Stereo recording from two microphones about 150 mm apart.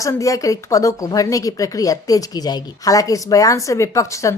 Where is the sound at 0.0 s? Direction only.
20° left (ahead or behind).